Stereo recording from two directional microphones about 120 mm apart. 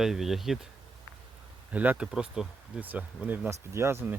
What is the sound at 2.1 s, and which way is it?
Speech, 5° right (ahead or behind).